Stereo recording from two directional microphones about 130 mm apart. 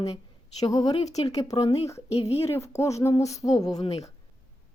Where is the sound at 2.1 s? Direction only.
55° left (ahead or behind).